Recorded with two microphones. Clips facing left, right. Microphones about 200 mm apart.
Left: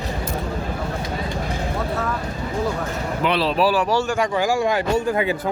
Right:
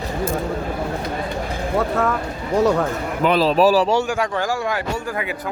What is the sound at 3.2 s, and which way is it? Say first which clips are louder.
Speech: right 4 dB; 45° right (ahead or behind).